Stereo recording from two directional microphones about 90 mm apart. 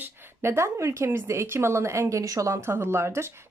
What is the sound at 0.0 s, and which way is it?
A woman's voice, 30° right (ahead or behind).